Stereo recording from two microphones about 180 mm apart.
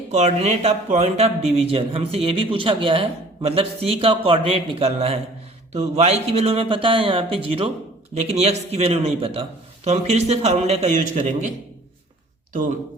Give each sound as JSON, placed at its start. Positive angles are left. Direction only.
{"t": 0.1, "sound": "a man's voice", "side_deg": -40}